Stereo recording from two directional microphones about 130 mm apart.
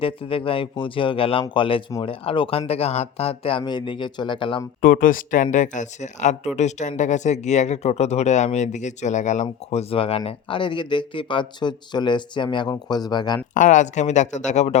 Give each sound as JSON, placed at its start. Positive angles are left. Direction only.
{"t": 0.0, "sound": "speech", "side_deg": 45}
{"t": 3.6, "sound": "speech", "side_deg": 35}
{"t": 4.8, "sound": "speech", "side_deg": 90}
{"t": 13.5, "sound": "speech", "side_deg": 75}